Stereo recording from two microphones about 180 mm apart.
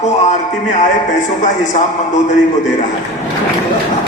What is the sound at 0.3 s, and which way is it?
A man's voice, 40° left (ahead or behind).